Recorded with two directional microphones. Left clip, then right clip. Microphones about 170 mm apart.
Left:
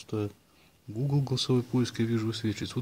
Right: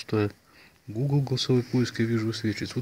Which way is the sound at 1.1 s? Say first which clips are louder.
Right 3 dB; 5° left (ahead or behind).